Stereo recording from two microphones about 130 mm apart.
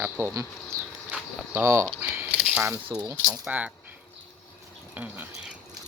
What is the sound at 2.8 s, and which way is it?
Speech, 30° right (ahead or behind).